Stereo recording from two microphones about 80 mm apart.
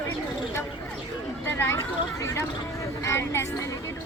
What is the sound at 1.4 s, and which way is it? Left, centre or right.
Speech, left.